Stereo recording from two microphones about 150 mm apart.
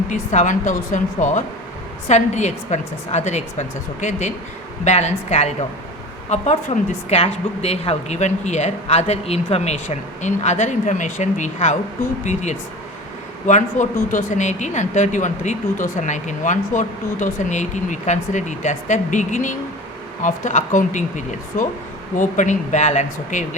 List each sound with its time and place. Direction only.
0.1 s speech: 55° left (ahead or behind)